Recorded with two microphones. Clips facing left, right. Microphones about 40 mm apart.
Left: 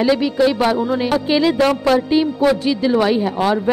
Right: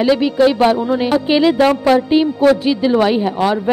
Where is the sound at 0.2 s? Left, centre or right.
Centre.